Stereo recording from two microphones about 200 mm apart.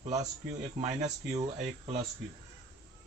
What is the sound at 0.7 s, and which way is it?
Speech, 35° right (ahead or behind).